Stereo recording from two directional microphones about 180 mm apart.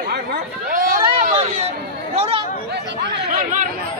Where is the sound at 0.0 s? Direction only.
55° right (ahead or behind).